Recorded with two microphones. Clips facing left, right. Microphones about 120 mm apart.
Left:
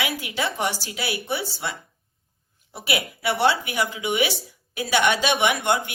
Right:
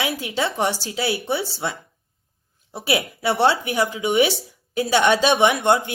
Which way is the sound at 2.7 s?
35° right (ahead or behind).